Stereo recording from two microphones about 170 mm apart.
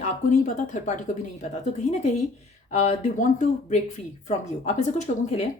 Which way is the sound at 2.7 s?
40° left (ahead or behind).